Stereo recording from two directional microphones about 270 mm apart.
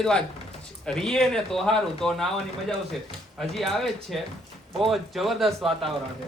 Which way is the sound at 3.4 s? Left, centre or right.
Centre.